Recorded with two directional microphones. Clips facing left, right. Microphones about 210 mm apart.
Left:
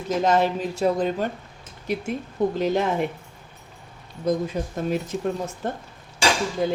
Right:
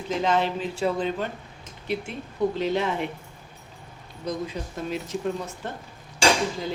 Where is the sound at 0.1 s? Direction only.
45° left (ahead or behind).